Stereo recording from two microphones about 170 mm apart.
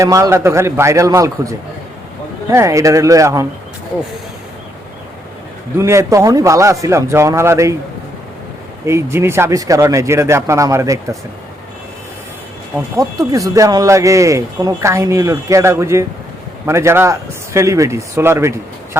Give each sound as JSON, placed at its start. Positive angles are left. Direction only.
{"t": 0.0, "sound": "speech", "side_deg": -15}
{"t": 5.7, "sound": "speech", "side_deg": -15}
{"t": 8.9, "sound": "speech", "side_deg": -15}
{"t": 13.0, "sound": "speech", "side_deg": -20}